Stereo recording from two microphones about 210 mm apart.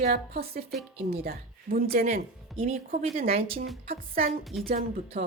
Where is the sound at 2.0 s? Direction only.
30° right (ahead or behind).